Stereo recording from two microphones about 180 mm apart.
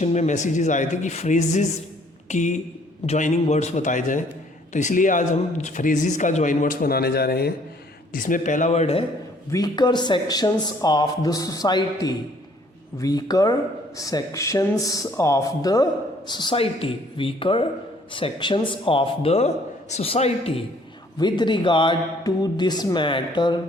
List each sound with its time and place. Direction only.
0.0 s a man's voice: 40° left (ahead or behind); by 7.5 s 60° left (ahead or behind)
8.1 s a man's voice: 50° left (ahead or behind)
9.5 s speech: 20° left (ahead or behind)
21.2 s speech: 25° left (ahead or behind)